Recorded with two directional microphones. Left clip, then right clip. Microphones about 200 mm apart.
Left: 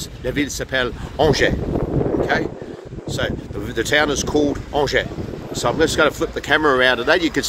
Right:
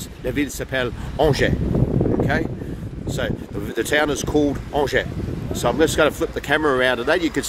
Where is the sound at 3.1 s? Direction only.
10° right (ahead or behind).